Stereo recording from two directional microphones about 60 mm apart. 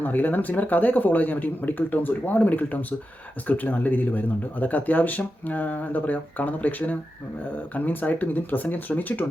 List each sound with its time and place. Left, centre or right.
0.0 s speech: left